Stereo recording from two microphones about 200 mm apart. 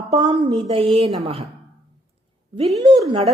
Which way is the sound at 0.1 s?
25° right (ahead or behind).